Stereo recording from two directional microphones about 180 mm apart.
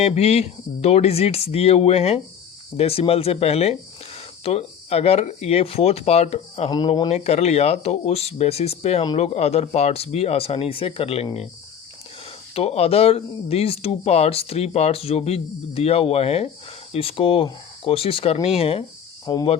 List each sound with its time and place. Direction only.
0.0 s speech: 35° left (ahead or behind)
7.1 s speech: 40° left (ahead or behind)
12.5 s speech: 35° left (ahead or behind)
19.2 s speech: 20° left (ahead or behind)